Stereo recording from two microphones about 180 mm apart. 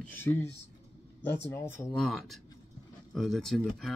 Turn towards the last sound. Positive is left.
turn(degrees=0)  # may be behind; listen again after turning